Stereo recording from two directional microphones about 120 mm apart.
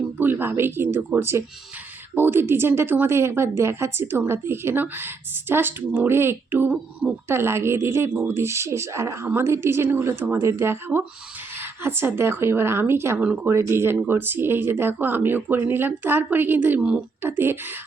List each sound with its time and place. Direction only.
0.2 s speech: 15° right (ahead or behind)
13.5 s speech: 20° right (ahead or behind)